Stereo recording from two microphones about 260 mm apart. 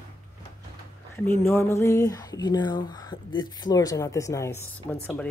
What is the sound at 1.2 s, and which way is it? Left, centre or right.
Speech, centre.